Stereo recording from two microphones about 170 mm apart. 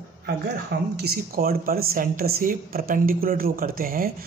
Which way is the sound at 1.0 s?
65° right (ahead or behind).